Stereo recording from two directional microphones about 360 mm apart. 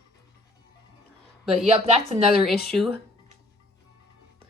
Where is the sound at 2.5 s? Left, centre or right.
Left.